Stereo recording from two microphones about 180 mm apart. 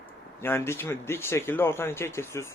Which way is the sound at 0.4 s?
15° left (ahead or behind).